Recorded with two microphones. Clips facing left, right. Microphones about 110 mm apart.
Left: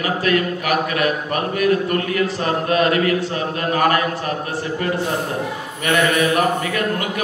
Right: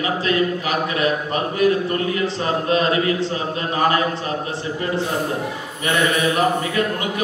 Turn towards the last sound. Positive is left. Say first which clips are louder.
# even
turn(degrees=-25)  # may be behind; listen again after turning